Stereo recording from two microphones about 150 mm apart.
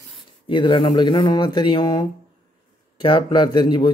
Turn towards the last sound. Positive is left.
turn(degrees=30)  # may be behind; listen again after turning